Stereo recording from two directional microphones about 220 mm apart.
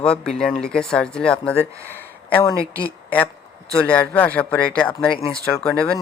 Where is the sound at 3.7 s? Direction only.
5° left (ahead or behind).